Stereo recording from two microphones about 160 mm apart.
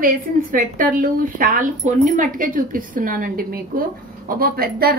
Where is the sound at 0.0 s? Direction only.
60° right (ahead or behind).